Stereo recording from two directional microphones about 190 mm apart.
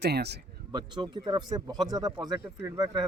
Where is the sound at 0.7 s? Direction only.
25° right (ahead or behind).